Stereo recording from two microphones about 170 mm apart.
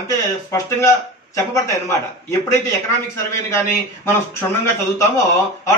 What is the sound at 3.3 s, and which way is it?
A man's voice, 15° left (ahead or behind).